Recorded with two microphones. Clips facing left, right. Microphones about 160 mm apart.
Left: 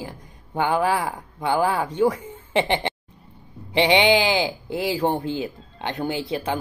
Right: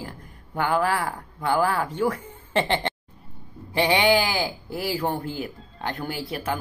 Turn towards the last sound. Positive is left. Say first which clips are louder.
# left 3 dB
turn(degrees=20)  # may be behind; listen again after turning